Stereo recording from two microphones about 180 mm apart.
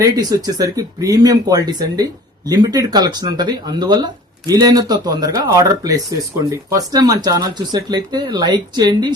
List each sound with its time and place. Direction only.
0.0 s speech: 20° right (ahead or behind)